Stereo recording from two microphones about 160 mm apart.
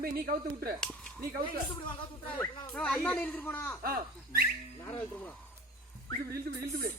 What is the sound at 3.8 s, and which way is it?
Speech, 70° right (ahead or behind).